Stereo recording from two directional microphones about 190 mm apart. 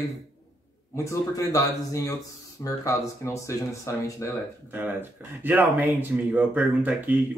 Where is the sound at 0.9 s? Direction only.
15° left (ahead or behind).